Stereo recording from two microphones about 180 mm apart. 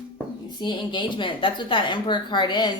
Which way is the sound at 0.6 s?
25° left (ahead or behind).